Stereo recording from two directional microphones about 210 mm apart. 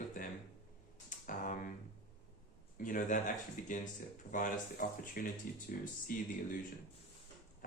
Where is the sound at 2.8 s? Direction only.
40° left (ahead or behind).